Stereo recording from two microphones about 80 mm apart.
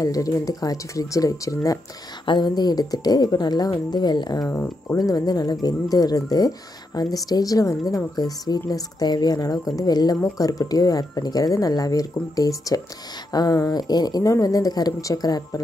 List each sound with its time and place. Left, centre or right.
0.0 s speech: left
2.2 s speech: left
4.5 s speech: left